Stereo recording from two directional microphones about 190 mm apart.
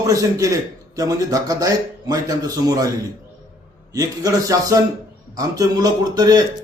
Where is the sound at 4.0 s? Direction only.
20° right (ahead or behind).